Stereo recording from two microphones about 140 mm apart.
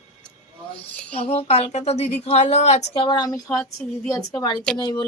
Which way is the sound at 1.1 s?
45° left (ahead or behind).